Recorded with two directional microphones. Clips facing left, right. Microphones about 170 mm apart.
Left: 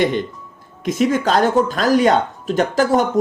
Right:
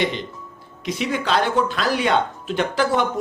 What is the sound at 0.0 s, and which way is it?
Speech, 50° left (ahead or behind).